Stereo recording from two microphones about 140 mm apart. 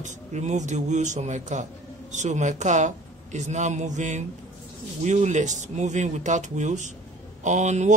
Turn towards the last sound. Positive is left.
turn(degrees=-55)  # may be behind; listen again after turning